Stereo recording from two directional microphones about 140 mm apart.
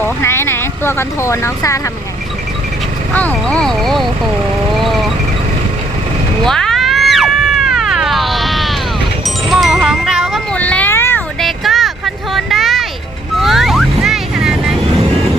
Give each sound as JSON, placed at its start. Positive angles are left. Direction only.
{"t": 0.0, "sound": "speech", "side_deg": 20}
{"t": 3.1, "sound": "speech", "side_deg": 10}
{"t": 4.7, "sound": "vehicle", "side_deg": 0}
{"t": 6.4, "sound": "music", "side_deg": 5}
{"t": 10.5, "sound": "a sound", "side_deg": 10}
{"t": 11.3, "sound": "vehicle", "side_deg": 0}